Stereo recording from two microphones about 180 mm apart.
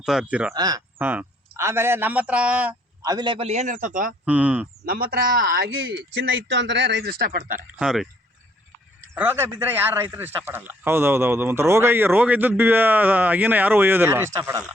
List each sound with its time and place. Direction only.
0.0 s speech: 5° right (ahead or behind)
0.5 s speech: 20° right (ahead or behind)
1.0 s a man's voice: 10° right (ahead or behind)
3.0 s a man's voice: 20° right (ahead or behind); by 4.1 s 50° right (ahead or behind)
4.3 s a man's voice: 5° right (ahead or behind)
4.9 s speech: 55° right (ahead or behind)
7.8 s speech: 5° right (ahead or behind)
9.1 s a man's voice: 10° right (ahead or behind)